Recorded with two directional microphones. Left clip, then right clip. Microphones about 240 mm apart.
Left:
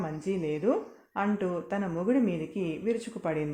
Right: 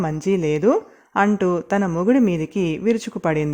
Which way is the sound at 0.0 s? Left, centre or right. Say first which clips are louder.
Right 11 dB; right.